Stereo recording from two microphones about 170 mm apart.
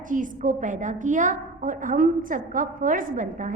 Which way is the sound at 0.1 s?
50° right (ahead or behind).